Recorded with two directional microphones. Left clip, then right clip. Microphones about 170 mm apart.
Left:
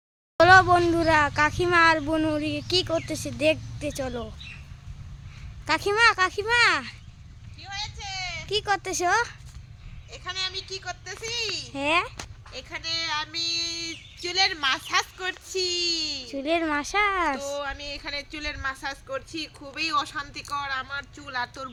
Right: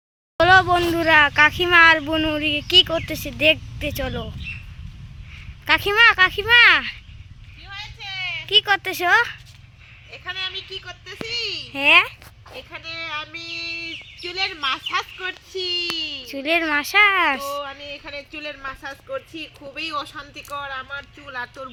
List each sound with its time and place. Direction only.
0.3 s speech: centre (ahead or behind)
5.6 s speech: centre (ahead or behind)
7.6 s a sound: 25° left (ahead or behind)
8.4 s speech: centre (ahead or behind)
10.2 s child singing: 25° left (ahead or behind)
10.7 s speech: 15° left (ahead or behind)
12.7 s child singing: 25° left (ahead or behind)
14.5 s child singing: 20° left (ahead or behind)
16.2 s speech: centre (ahead or behind)
17.6 s child singing: 20° left (ahead or behind)
18.0 s speech: 5° left (ahead or behind)
18.3 s speech: 20° left (ahead or behind)